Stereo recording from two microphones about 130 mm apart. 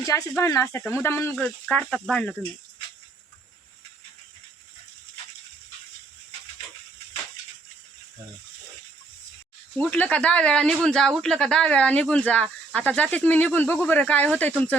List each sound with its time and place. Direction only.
0.0 s speech: 25° left (ahead or behind)
1.6 s speech: 5° left (ahead or behind)
9.7 s speech: 10° left (ahead or behind)